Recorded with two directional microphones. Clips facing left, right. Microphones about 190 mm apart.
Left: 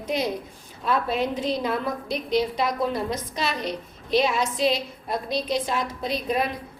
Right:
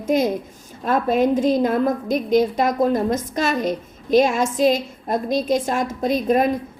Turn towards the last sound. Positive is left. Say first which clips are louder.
# right 8 dB
turn(degrees=-45)  # may be behind; listen again after turning